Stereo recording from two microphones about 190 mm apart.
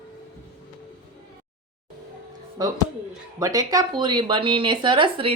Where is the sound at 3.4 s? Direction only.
20° right (ahead or behind).